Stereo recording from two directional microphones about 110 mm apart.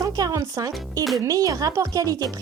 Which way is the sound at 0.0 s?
30° right (ahead or behind).